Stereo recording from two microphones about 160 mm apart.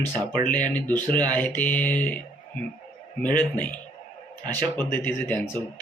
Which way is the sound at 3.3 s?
10° left (ahead or behind).